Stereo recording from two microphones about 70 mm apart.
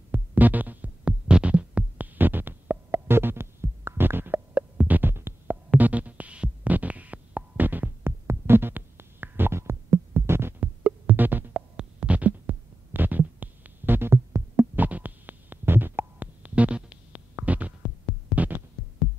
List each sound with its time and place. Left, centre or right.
0.1 s heart sounds: right
5.7 s music: right
10.6 s music: right
11.7 s heart sounds: centre; by 14.2 s right
14.8 s heart murmur: right
17.4 s throbbing: right